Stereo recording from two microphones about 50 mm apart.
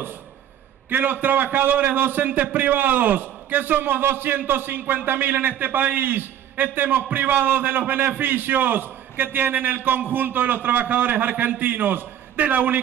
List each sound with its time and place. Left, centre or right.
0.8 s a man's voice: right